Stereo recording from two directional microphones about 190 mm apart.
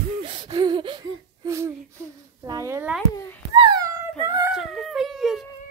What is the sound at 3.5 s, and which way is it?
Cat, 25° right (ahead or behind).